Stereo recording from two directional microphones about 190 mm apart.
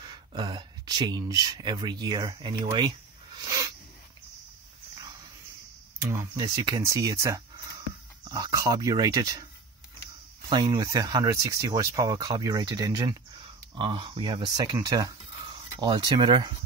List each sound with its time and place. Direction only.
0.0 s speech: 20° right (ahead or behind)
3.3 s a sound: 15° right (ahead or behind)
6.0 s speech: 20° right (ahead or behind)
10.5 s speech: 20° right (ahead or behind)